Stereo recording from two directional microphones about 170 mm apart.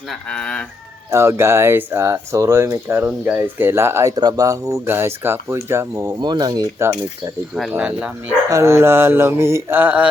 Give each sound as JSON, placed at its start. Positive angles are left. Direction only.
{"t": 0.3, "sound": "speech", "side_deg": 5}
{"t": 1.1, "sound": "speech", "side_deg": -15}
{"t": 7.7, "sound": "speech", "side_deg": -5}
{"t": 8.4, "sound": "speech", "side_deg": -20}